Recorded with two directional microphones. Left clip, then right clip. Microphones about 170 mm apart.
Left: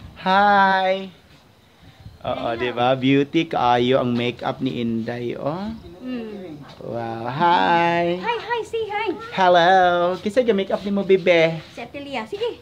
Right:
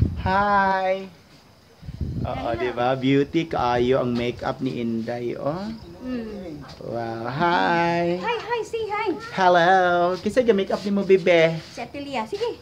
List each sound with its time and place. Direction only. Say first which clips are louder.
0.2 s speech: left 5 dB; 60° left (ahead or behind)
2.2 s speech: left 2 dB; 65° left (ahead or behind)
4.2 s speech: left 2 dB; 40° left (ahead or behind)
6.0 s a child's voice: even; 10° left (ahead or behind)
6.9 s speech: left 1 dB; 30° left (ahead or behind)
8.7 s a child's voice: left 1 dB; 10° left (ahead or behind)
9.3 s speech: left 2 dB; 30° left (ahead or behind)
11.8 s a woman's voice: right 1 dB; centre (ahead or behind)